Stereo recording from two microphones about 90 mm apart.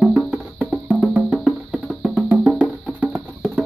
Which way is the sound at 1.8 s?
5° right (ahead or behind).